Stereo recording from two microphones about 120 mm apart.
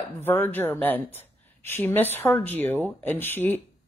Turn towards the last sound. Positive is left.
turn(degrees=15)  # may be behind; listen again after turning